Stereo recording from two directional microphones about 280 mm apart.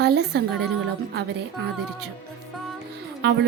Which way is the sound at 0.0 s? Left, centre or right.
Right.